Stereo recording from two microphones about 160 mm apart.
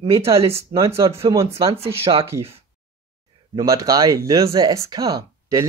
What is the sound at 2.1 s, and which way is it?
Speech, 35° right (ahead or behind).